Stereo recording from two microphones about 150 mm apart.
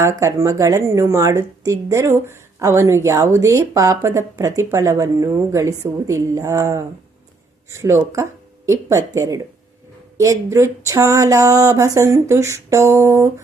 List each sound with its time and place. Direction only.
0.0 s speech: 20° right (ahead or behind)
8.1 s speech: 20° right (ahead or behind)